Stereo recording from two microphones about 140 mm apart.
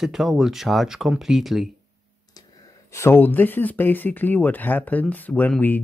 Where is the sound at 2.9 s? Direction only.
20° left (ahead or behind).